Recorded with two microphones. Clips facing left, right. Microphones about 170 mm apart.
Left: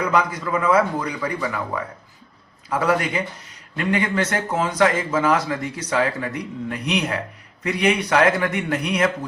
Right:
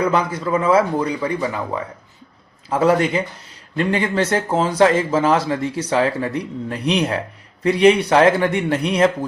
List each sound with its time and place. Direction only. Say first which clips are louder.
0.1 s speech: right 2 dB; 30° right (ahead or behind)